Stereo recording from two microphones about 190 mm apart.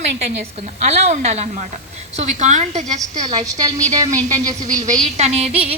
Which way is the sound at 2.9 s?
20° right (ahead or behind).